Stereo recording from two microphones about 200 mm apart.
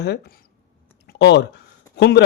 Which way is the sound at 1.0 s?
60° left (ahead or behind).